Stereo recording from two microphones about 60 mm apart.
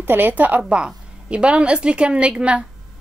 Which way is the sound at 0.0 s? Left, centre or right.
Right.